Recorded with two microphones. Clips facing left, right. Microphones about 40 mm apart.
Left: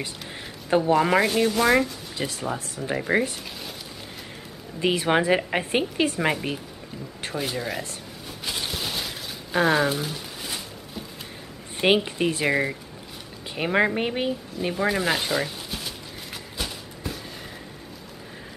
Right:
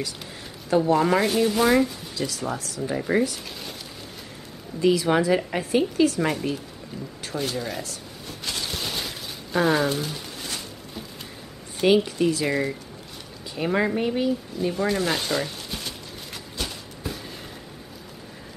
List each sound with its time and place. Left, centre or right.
0.7 s speech: left
0.9 s speech: centre
1.2 s speech: centre
2.1 s a woman's voice: left
4.7 s a woman's voice: left
7.3 s speech: centre
8.3 s a sound: centre
11.8 s a woman's voice: left
14.7 s speech: centre
16.5 s a sound: centre